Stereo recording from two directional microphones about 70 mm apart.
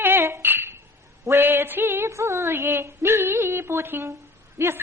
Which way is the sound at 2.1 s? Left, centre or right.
Right.